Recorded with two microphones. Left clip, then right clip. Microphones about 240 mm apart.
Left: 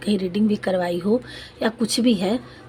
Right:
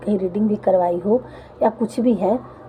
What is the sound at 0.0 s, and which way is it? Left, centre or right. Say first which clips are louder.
A woman's voice: right 2 dB; left.